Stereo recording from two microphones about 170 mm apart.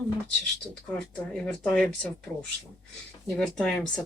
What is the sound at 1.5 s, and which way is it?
Speech, 5° left (ahead or behind).